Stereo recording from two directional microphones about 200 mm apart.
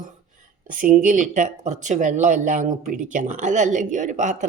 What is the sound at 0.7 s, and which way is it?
Speech, 40° right (ahead or behind).